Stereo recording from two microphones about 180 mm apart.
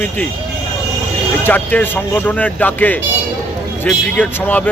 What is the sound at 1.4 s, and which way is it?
Speech, 10° left (ahead or behind).